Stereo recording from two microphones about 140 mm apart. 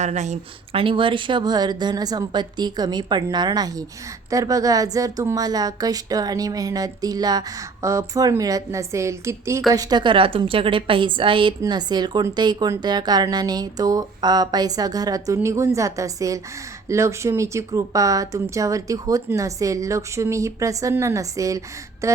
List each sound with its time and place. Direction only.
0.0 s speech: 55° right (ahead or behind)
0.8 s a woman's voice: 40° right (ahead or behind); by 22.2 s 20° right (ahead or behind)